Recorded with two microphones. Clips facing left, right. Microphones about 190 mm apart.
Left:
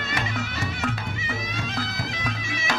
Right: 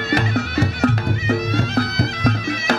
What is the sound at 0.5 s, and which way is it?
Music, 60° right (ahead or behind).